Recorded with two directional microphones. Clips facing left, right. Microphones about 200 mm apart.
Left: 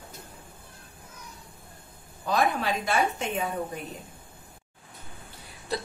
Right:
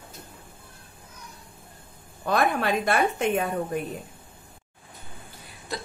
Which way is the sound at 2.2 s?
60° right (ahead or behind).